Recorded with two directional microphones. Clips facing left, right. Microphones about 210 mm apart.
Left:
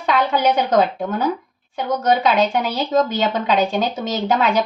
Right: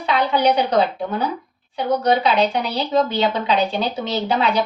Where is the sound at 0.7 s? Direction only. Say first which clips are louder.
Left 2 dB; 45° left (ahead or behind).